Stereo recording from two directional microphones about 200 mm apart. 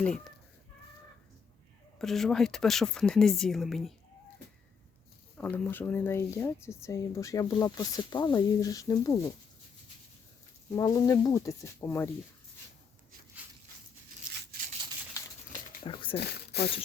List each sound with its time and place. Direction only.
0.0 s speech: 5° left (ahead or behind)
2.0 s speech: centre (ahead or behind)
5.4 s speech: 10° left (ahead or behind)
10.7 s speech: 15° left (ahead or behind)
14.5 s a sound: 45° right (ahead or behind)
15.8 s speech: 25° left (ahead or behind)
16.1 s speech: 55° left (ahead or behind)